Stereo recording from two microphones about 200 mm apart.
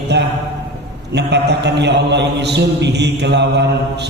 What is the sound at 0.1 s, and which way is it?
A man's voice, 60° right (ahead or behind).